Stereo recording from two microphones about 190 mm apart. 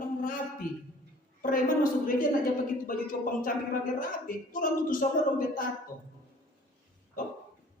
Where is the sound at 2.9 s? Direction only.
45° left (ahead or behind).